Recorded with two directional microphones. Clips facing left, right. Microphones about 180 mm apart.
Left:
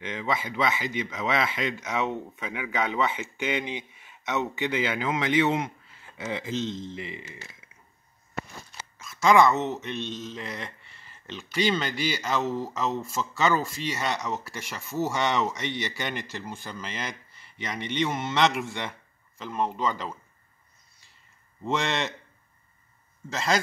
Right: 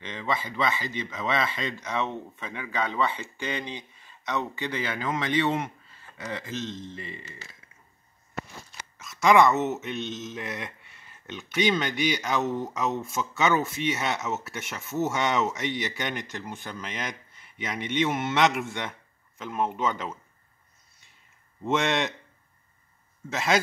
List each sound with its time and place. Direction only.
0.0 s a man's voice: 10° left (ahead or behind)
5.0 s a man's voice: 10° left (ahead or behind)
8.9 s speech: centre (ahead or behind)
21.6 s speech: centre (ahead or behind)
23.3 s speech: centre (ahead or behind)